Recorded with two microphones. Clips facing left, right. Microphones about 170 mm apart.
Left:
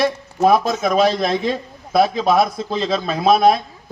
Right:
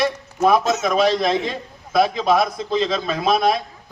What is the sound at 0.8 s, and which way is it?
Speech, 40° left (ahead or behind).